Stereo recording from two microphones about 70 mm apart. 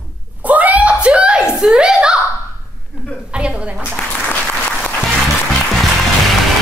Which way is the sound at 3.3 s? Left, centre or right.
Centre.